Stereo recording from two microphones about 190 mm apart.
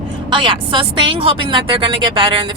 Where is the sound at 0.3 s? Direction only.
25° right (ahead or behind).